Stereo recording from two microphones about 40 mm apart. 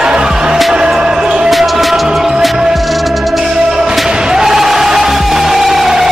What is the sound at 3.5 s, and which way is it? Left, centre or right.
Music, centre.